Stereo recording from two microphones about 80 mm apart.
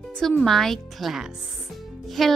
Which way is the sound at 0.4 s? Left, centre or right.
Centre.